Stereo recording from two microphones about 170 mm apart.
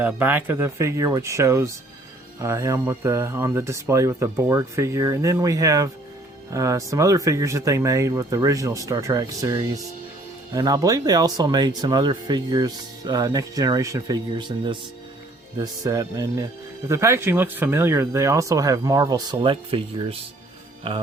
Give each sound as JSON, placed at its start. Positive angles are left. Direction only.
{"t": 0.0, "sound": "speech", "side_deg": -10}